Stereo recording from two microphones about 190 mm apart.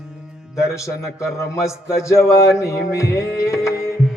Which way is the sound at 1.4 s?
15° left (ahead or behind).